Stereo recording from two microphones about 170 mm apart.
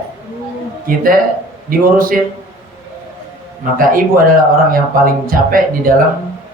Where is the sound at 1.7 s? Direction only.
55° right (ahead or behind).